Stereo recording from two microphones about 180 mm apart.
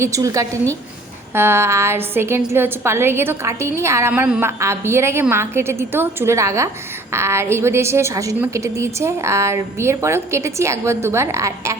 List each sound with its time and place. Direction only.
0.0 s a woman's voice: 15° right (ahead or behind)